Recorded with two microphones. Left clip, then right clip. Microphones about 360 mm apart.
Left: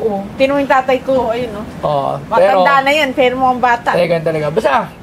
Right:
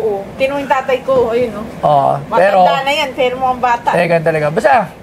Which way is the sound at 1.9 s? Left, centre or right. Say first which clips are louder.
Right 4 dB; right.